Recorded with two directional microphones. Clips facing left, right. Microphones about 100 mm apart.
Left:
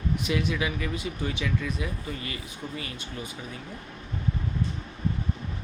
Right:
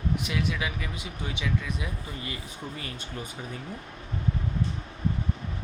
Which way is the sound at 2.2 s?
30° right (ahead or behind).